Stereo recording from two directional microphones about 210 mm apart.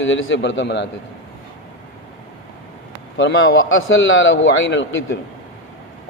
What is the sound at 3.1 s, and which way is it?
A man's voice, 65° left (ahead or behind).